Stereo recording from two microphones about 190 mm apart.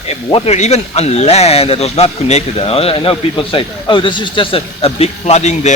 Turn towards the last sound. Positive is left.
turn(degrees=35)  # may be behind; listen again after turning